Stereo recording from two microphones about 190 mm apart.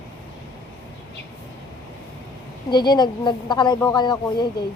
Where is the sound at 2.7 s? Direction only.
20° left (ahead or behind).